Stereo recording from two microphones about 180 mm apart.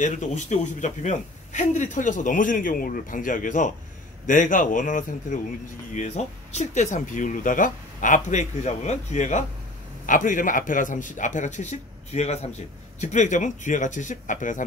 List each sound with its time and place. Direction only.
0.0 s a man's voice: 45° left (ahead or behind)